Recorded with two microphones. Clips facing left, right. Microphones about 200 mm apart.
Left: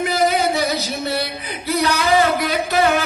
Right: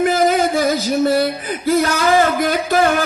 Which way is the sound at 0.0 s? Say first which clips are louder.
Right 3 dB; 45° right (ahead or behind).